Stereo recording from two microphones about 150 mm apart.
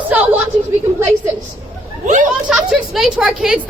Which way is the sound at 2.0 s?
55° right (ahead or behind).